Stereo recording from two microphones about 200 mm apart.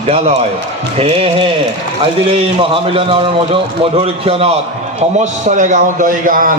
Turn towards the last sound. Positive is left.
turn(degrees=-45)  # may be behind; listen again after turning